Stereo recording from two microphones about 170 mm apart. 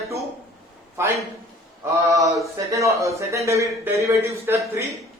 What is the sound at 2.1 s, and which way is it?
A man's voice, 20° right (ahead or behind).